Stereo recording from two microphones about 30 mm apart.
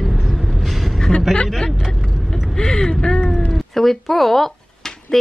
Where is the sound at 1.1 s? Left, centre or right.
Centre.